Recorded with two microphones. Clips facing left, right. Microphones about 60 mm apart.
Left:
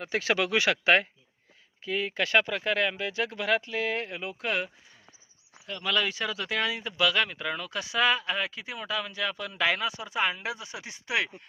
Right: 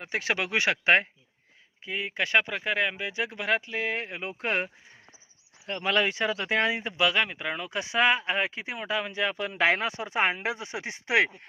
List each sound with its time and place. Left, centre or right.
0.0 s speech: right